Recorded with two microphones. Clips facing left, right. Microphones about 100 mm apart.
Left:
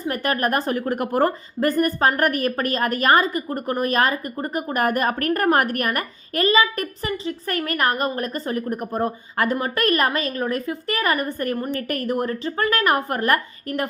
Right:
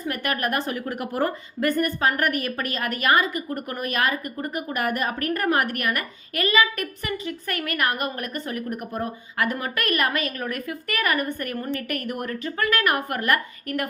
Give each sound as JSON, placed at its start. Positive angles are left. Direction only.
{"t": 0.0, "sound": "a woman's voice", "side_deg": 35}